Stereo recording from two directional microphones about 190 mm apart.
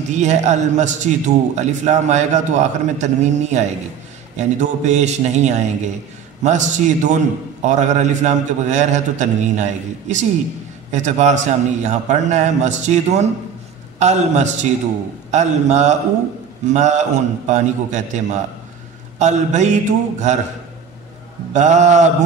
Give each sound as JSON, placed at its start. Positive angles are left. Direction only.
{"t": 0.1, "sound": "a man's voice", "side_deg": -40}
{"t": 21.5, "sound": "a man's voice", "side_deg": -40}